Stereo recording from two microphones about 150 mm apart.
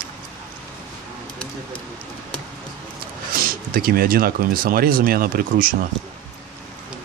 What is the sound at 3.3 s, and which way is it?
Speech, 70° right (ahead or behind).